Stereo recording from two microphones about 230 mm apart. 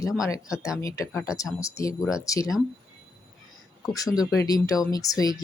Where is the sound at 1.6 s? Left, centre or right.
Centre.